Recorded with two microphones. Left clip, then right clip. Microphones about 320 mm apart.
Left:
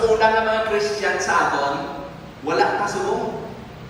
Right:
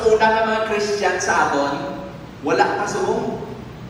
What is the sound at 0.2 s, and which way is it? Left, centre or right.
Music, centre.